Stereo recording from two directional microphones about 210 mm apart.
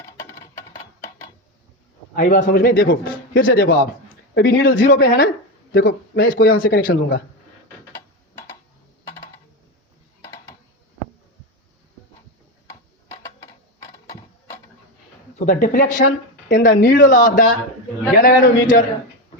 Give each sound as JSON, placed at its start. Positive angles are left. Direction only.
{"t": 0.0, "sound": "a sound", "side_deg": 15}
{"t": 2.1, "sound": "a man's voice", "side_deg": 40}
{"t": 15.4, "sound": "speech", "side_deg": 40}